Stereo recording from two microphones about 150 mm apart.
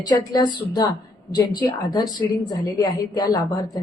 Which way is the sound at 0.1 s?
25° left (ahead or behind).